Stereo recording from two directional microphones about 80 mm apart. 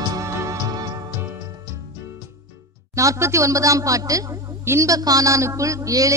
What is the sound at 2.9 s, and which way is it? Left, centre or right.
A man's voice, right.